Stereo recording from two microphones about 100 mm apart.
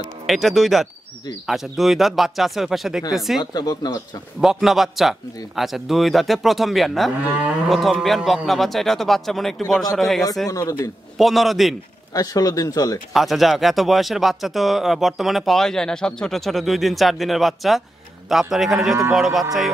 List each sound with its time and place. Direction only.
0.3 s speech: centre (ahead or behind)
3.5 s speech: 40° left (ahead or behind)
4.4 s speech: 5° right (ahead or behind)
10.5 s speech: 35° left (ahead or behind)
11.1 s speech: centre (ahead or behind)
12.1 s speech: 40° left (ahead or behind)
13.1 s speech: centre (ahead or behind)